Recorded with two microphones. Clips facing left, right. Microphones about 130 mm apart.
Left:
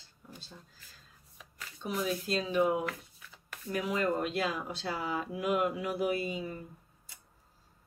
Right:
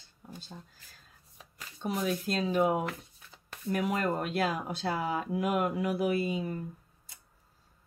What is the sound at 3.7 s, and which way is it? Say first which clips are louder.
Speech: right 1 dB; 50° right (ahead or behind).